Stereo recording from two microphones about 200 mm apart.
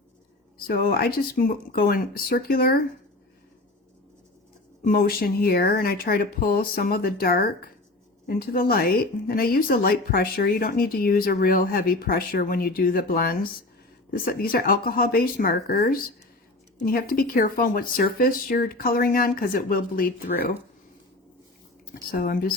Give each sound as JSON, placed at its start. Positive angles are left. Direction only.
{"t": 0.7, "sound": "speech", "side_deg": 50}
{"t": 4.8, "sound": "speech", "side_deg": 45}
{"t": 22.1, "sound": "speech", "side_deg": 45}